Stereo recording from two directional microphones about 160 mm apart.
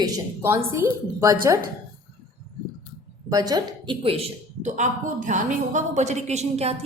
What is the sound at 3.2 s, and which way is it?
Speech, 25° right (ahead or behind).